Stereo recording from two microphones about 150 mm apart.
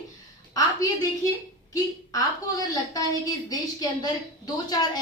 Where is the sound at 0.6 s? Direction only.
25° left (ahead or behind).